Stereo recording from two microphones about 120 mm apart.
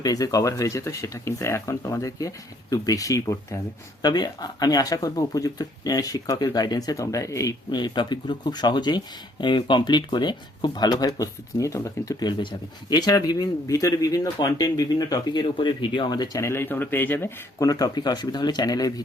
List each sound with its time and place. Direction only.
0.0 s speech: 30° left (ahead or behind)
4.0 s speech: 35° left (ahead or behind)
16.4 s speech: 20° left (ahead or behind)
17.7 s speech: 30° left (ahead or behind)